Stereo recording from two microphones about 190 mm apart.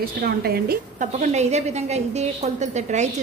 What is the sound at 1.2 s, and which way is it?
A woman's voice, 35° right (ahead or behind).